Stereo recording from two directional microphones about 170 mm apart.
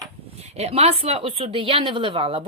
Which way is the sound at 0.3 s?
40° right (ahead or behind).